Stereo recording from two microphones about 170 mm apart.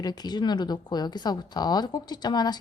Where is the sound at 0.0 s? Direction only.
25° left (ahead or behind).